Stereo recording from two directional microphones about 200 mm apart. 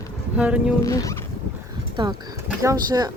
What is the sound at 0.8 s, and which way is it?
Speech, 15° left (ahead or behind).